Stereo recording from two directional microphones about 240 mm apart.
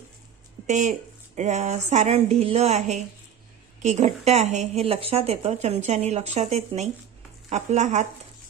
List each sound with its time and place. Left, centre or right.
0.7 s a woman's voice: right